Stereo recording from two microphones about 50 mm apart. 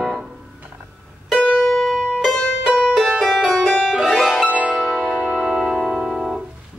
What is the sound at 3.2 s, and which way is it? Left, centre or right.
Music, centre.